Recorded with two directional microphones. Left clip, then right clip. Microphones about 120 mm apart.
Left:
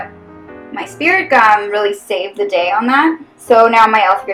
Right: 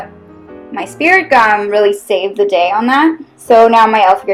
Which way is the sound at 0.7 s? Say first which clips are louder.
Right 3 dB; 70° right (ahead or behind).